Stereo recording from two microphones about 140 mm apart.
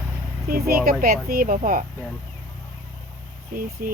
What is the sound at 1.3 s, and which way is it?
Speech, 85° right.